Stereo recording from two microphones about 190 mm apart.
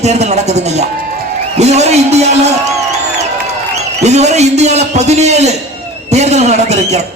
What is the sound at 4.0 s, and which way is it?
A man's voice, 35° right (ahead or behind).